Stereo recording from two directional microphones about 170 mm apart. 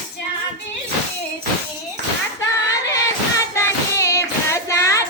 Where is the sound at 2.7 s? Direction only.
20° left (ahead or behind).